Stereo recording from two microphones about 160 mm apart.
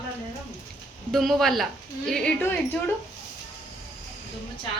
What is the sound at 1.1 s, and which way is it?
A woman's voice, centre (ahead or behind).